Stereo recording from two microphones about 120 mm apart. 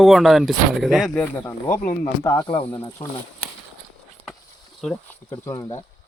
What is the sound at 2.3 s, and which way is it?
Speech, 45° left (ahead or behind).